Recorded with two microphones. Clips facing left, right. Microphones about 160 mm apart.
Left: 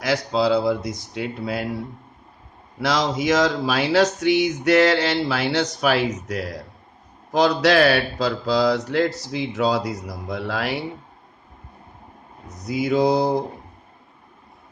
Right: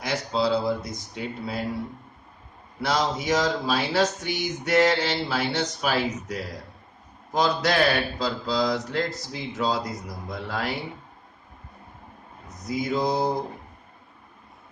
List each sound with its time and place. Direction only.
0.0 s speech: 85° left
2.8 s speech: 90° left
7.3 s speech: 75° left (ahead or behind)
12.6 s speech: 75° left (ahead or behind)